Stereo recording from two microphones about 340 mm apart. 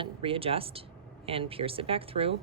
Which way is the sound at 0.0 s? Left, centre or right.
Centre.